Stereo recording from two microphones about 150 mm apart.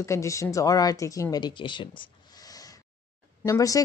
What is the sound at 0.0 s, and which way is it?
A woman's voice, 20° left (ahead or behind).